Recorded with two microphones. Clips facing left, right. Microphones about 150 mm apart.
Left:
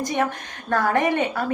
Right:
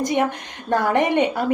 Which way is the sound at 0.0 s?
20° right (ahead or behind).